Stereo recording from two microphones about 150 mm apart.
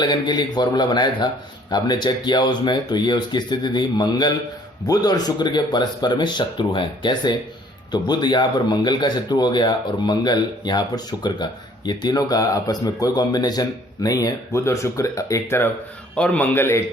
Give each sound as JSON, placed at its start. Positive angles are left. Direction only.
{"t": 0.0, "sound": "a man's voice", "side_deg": 30}